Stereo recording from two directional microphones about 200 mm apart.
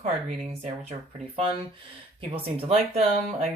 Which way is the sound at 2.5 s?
30° right (ahead or behind).